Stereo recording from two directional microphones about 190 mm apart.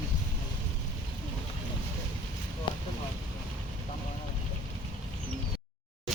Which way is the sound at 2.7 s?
25° left (ahead or behind).